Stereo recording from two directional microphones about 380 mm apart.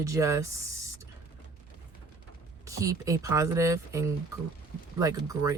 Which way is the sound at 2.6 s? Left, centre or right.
Centre.